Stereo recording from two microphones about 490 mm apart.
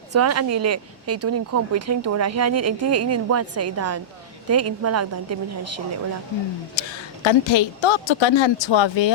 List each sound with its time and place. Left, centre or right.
0.1 s speech: right
6.8 s a woman's voice: left